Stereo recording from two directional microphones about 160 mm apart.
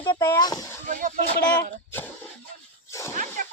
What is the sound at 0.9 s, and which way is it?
Speech, 55° right (ahead or behind).